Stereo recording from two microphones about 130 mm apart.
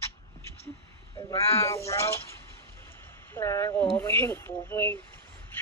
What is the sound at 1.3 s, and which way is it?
Speech, 50° left (ahead or behind).